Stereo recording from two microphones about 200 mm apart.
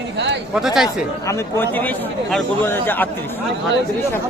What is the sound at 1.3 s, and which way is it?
A man's voice, 10° left (ahead or behind).